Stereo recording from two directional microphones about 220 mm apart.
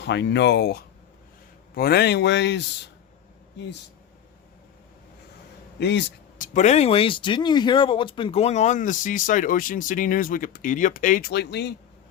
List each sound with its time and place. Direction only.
0.0 s a man's voice: 50° left (ahead or behind)
5.8 s a man's voice: 50° left (ahead or behind)
6.4 s speech: 35° left (ahead or behind); by 11.7 s 50° left (ahead or behind)